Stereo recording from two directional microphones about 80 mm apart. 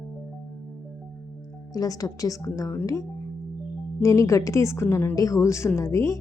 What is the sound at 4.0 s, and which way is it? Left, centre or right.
Speech, left.